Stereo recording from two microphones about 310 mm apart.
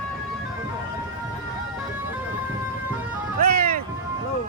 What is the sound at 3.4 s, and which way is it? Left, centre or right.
Vehicle, right.